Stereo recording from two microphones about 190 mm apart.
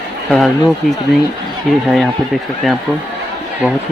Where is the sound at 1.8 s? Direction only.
Centre (ahead or behind).